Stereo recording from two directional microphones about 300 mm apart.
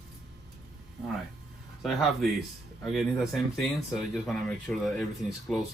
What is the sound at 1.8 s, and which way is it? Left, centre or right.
Speech, centre.